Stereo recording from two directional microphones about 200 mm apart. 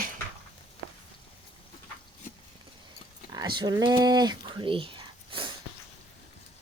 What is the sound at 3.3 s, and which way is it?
Speech, 20° right (ahead or behind).